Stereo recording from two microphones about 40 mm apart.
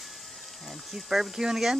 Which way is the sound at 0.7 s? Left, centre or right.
Centre.